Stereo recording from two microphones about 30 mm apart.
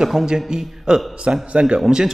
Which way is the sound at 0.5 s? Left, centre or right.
Right.